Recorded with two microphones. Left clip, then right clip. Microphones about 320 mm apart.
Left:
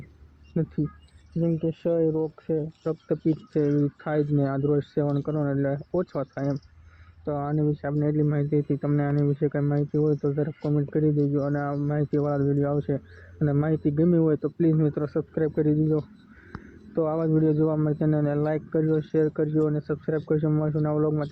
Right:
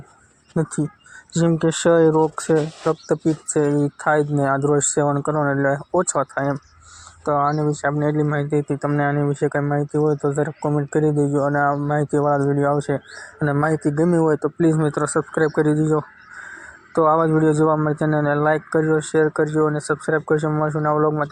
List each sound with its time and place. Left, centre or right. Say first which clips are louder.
1.5 s speech: right 8 dB; right
1.7 s speech: right 11 dB; centre